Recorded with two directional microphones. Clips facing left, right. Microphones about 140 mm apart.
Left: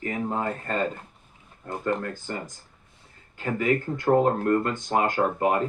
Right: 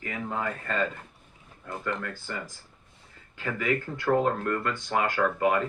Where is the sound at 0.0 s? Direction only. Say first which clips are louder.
Left 4 dB; 35° left (ahead or behind).